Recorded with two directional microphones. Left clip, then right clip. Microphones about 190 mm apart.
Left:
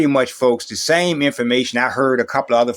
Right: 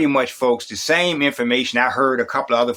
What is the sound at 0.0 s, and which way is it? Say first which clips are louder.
Speech: left 2 dB; 30° left (ahead or behind).